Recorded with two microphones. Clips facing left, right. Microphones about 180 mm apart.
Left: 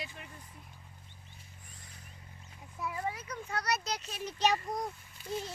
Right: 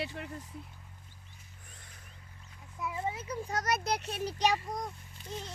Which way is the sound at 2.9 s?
25° right (ahead or behind).